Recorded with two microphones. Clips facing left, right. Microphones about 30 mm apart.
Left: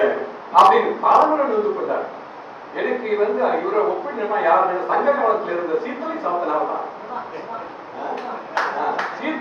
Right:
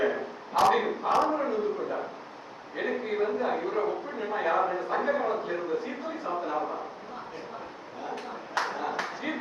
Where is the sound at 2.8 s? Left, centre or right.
Left.